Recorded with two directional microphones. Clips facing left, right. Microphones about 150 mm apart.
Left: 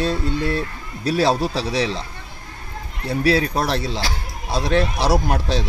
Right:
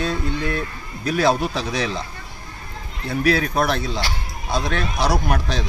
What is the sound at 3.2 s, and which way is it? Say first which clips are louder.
Speech: even; 30° left (ahead or behind).